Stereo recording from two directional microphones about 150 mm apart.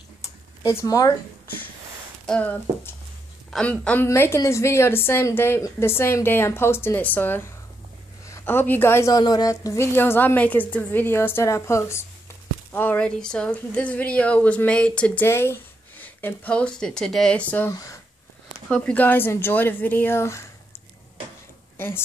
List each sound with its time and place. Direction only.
0.7 s speech: 25° left (ahead or behind)
2.2 s speech: 10° left (ahead or behind)
3.8 s a woman's voice: 15° left (ahead or behind)
21.7 s a woman's voice: 15° left (ahead or behind)